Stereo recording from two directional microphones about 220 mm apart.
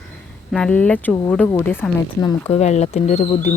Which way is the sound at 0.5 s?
5° left (ahead or behind).